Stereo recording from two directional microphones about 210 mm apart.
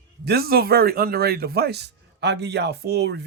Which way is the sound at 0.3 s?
45° right (ahead or behind).